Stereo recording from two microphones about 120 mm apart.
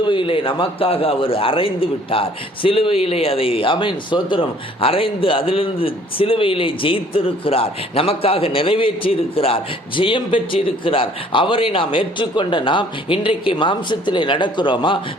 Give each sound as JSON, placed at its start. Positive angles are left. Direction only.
{"t": 0.0, "sound": "a man's voice", "side_deg": 45}